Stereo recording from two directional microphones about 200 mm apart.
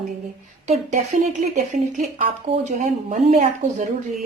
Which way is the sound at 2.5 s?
35° right (ahead or behind).